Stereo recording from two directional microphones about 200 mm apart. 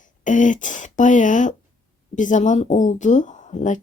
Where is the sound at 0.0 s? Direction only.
40° left (ahead or behind).